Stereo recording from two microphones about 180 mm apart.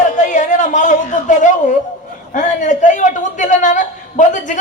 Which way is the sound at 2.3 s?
45° left (ahead or behind).